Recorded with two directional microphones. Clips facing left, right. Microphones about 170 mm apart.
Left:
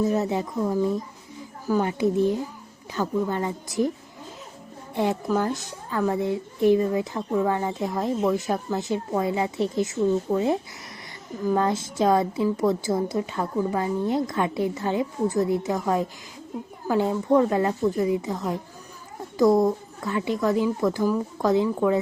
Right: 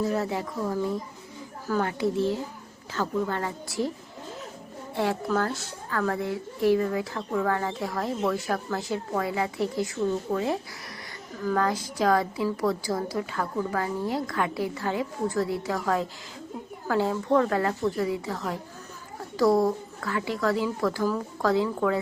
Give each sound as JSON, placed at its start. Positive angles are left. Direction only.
{"t": 0.0, "sound": "a woman's voice", "side_deg": 20}
{"t": 4.9, "sound": "a woman's voice", "side_deg": 15}